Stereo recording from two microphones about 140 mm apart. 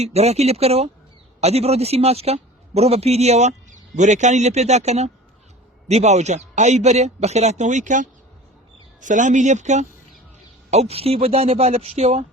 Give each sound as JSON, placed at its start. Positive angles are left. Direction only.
{"t": 0.0, "sound": "a man's voice", "side_deg": -50}